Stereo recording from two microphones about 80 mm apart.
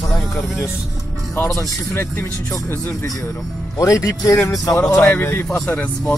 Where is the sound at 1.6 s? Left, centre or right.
Left.